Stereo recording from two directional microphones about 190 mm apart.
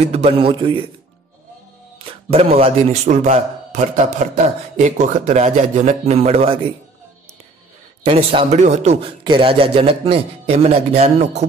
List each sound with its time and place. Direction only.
0.0 s a man's voice: 35° right (ahead or behind)
2.0 s a man's voice: 30° right (ahead or behind)
8.0 s a man's voice: 30° right (ahead or behind)
9.2 s a man's voice: 25° right (ahead or behind)